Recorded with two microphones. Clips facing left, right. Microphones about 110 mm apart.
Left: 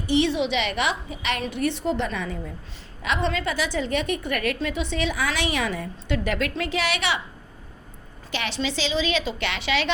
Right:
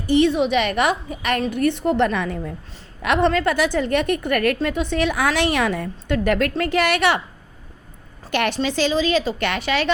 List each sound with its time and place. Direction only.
0.1 s a woman's voice: 45° right (ahead or behind)
8.3 s a woman's voice: 55° right (ahead or behind)